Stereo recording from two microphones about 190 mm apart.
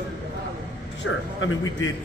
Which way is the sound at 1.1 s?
90° left.